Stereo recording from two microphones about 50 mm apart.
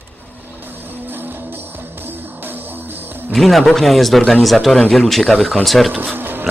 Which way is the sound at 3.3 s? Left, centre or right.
Centre.